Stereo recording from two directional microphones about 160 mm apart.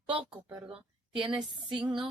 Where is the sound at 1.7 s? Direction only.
30° right (ahead or behind).